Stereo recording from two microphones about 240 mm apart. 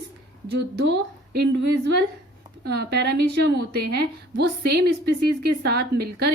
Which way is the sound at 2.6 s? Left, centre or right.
Right.